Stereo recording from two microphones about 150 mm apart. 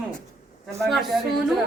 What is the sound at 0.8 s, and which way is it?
Speech, centre (ahead or behind).